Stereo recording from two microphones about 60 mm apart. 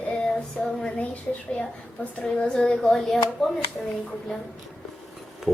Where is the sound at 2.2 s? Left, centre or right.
Centre.